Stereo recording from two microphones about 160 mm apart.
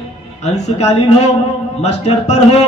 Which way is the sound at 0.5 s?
40° left (ahead or behind).